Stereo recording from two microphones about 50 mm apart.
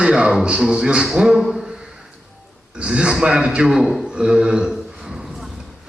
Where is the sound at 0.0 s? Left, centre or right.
Centre.